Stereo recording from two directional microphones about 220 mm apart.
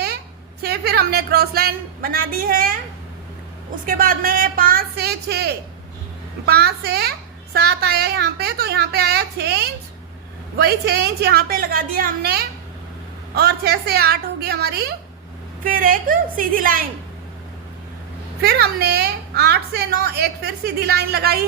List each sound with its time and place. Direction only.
0.6 s a woman's voice: 45° right (ahead or behind)
3.8 s a woman's voice: 40° right (ahead or behind)
18.4 s a woman's voice: 45° right (ahead or behind)